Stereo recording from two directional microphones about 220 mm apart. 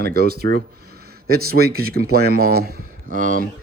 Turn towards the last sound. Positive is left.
turn(degrees=-40)  # may be behind; listen again after turning